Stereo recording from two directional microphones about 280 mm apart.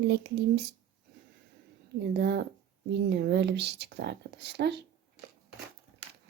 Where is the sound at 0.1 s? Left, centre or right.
Right.